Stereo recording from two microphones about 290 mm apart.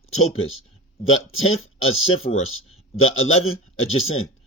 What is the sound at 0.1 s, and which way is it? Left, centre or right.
Speech, left.